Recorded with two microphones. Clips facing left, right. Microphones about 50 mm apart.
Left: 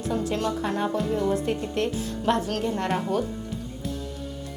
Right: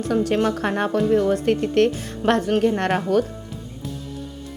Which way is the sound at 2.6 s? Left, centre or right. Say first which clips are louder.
Right 6 dB; right.